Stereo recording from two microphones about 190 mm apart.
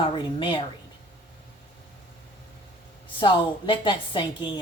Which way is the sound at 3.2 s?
25° left (ahead or behind).